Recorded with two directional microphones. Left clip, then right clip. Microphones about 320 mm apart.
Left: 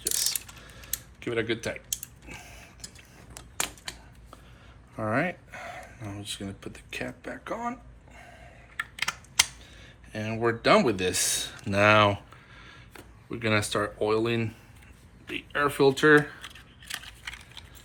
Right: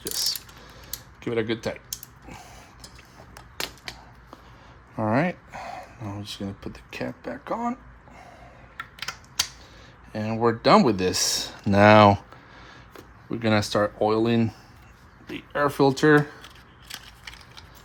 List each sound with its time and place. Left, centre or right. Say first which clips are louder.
0.0 s mechanisms: right 2 dB; right
4.9 s a sound: right 4 dB; right
6.3 s speech: right 3 dB; right
10.1 s speech: right 4 dB; right